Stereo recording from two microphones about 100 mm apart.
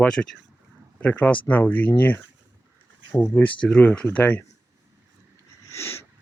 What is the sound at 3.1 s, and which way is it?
Speech, 20° left (ahead or behind).